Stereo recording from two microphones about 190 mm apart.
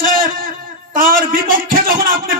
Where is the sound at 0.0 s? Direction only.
45° right (ahead or behind).